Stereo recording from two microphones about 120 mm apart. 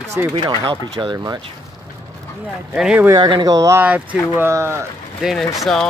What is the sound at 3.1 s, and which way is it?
Speech, 35° right (ahead or behind).